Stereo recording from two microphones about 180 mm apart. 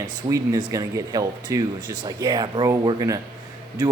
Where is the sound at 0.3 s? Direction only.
20° right (ahead or behind).